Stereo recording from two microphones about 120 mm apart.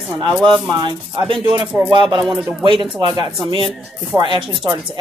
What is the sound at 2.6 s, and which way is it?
Speech, 40° right (ahead or behind).